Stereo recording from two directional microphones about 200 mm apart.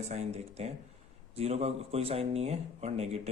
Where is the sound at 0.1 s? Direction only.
35° right (ahead or behind).